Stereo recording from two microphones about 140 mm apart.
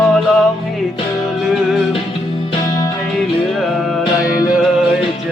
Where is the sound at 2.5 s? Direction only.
25° left (ahead or behind).